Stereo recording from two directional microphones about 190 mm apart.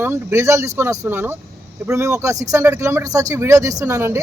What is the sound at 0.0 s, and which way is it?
Speech, 15° right (ahead or behind).